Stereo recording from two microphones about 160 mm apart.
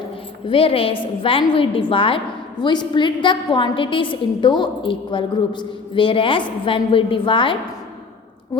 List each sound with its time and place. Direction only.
0.4 s a woman's voice: 35° left (ahead or behind)